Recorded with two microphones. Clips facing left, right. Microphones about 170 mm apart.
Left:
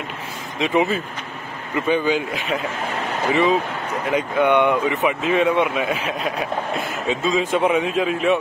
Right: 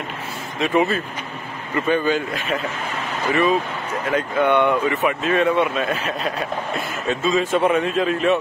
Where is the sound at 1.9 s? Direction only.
15° left (ahead or behind).